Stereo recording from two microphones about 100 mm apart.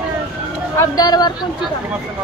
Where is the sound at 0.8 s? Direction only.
40° left (ahead or behind).